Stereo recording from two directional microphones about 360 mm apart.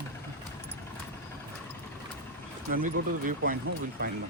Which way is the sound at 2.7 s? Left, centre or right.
Right.